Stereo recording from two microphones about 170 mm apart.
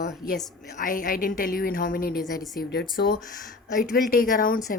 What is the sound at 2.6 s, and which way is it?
Speech, 70° left (ahead or behind).